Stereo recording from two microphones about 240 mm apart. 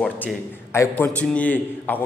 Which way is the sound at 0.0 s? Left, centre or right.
Centre.